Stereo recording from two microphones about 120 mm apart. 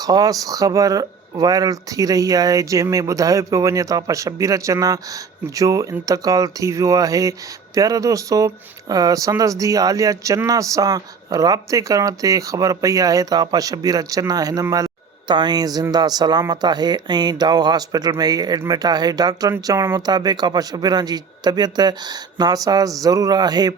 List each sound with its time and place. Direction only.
0.0 s speech: 30° right (ahead or behind)